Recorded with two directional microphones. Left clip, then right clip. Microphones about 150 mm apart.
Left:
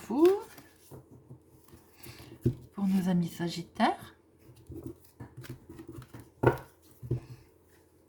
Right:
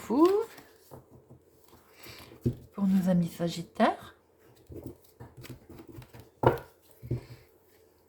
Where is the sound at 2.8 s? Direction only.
15° right (ahead or behind).